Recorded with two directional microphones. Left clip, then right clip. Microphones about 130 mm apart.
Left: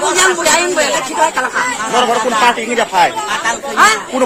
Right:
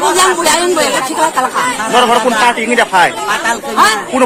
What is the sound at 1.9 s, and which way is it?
Speech, 20° left (ahead or behind).